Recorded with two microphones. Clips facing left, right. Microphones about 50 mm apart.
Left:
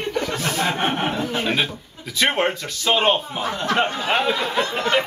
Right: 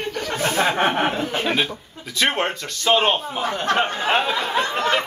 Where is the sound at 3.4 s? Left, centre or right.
Right.